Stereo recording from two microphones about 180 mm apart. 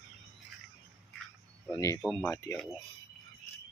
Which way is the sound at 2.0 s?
5° left (ahead or behind).